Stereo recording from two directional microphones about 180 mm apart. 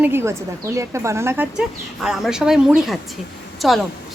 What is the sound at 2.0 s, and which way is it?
A woman's voice, 5° right (ahead or behind).